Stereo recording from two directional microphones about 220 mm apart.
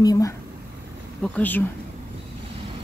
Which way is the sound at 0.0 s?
15° left (ahead or behind).